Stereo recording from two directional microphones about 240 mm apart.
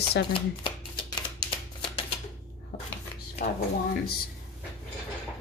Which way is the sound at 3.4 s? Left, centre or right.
Left.